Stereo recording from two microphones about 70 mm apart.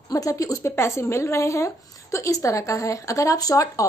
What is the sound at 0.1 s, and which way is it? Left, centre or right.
A woman's voice, left.